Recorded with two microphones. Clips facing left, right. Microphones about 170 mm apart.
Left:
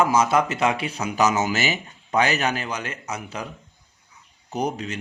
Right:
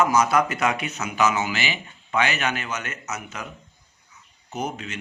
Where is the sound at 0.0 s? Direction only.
30° left (ahead or behind).